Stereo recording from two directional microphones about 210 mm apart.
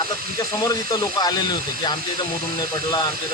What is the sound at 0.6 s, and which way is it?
Speech, 20° left (ahead or behind).